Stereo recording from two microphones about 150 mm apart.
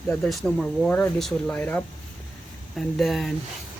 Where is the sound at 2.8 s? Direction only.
Centre (ahead or behind).